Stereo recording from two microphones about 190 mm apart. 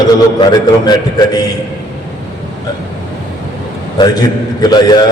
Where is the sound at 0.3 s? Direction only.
20° left (ahead or behind).